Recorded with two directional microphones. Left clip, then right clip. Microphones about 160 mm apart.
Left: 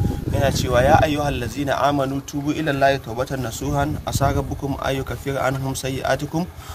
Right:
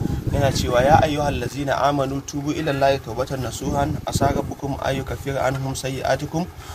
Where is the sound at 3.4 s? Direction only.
15° left (ahead or behind).